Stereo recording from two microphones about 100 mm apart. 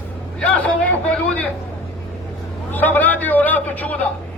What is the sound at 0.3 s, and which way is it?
Speech, 10° left (ahead or behind).